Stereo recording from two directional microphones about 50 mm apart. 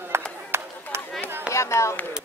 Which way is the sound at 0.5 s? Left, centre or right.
Right.